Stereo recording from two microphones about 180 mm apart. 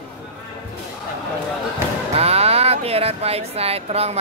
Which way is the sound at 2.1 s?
35° right (ahead or behind).